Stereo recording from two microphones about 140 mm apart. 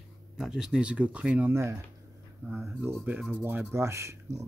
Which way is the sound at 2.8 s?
15° right (ahead or behind).